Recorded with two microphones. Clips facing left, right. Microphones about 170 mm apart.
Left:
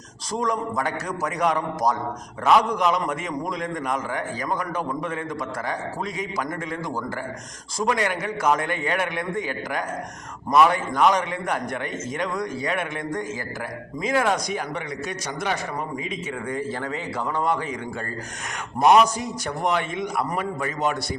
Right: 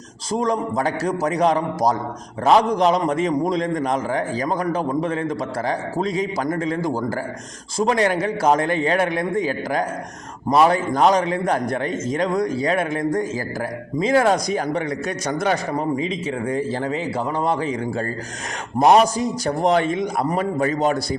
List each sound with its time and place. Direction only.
0.3 s a man's voice: 25° right (ahead or behind); by 15.8 s 45° right (ahead or behind)
16.5 s a man's voice: 25° right (ahead or behind)